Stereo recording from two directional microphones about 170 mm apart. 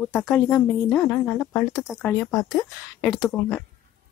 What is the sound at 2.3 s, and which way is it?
Speech, 20° left (ahead or behind).